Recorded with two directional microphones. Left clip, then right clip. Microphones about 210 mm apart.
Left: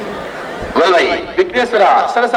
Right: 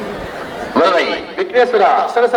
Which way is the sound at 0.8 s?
45° left (ahead or behind).